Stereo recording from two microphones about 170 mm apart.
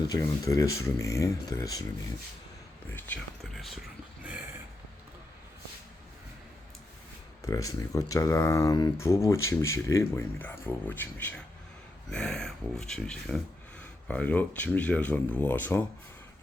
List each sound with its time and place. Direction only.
0.1 s speech: 20° left (ahead or behind)
2.9 s a sound: 10° left (ahead or behind)
7.4 s speech: 20° left (ahead or behind)